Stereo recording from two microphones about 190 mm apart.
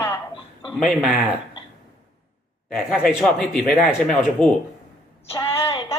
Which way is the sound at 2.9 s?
Centre (ahead or behind).